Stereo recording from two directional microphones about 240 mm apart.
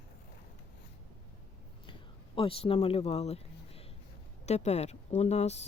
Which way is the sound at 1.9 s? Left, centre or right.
Left.